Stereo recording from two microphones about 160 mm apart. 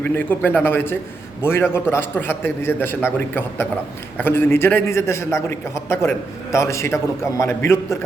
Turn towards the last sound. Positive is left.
turn(degrees=15)  # may be behind; listen again after turning